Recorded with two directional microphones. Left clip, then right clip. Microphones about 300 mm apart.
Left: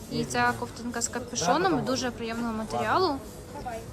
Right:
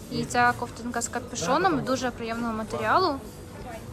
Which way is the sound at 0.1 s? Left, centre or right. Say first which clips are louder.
Right 3 dB; centre.